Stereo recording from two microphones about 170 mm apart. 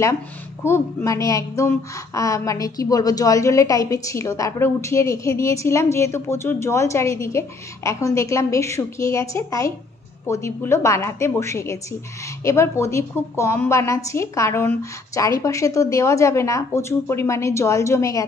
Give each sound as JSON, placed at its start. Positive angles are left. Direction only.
{"t": 0.7, "sound": "a woman's voice", "side_deg": 15}